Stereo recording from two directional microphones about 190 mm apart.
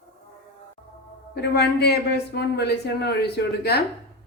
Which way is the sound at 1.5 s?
60° left (ahead or behind).